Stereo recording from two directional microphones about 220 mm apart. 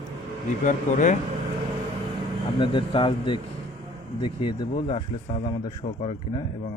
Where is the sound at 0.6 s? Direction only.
35° left (ahead or behind).